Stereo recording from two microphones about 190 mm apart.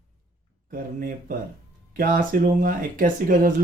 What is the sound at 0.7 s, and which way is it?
Speech, 45° right (ahead or behind).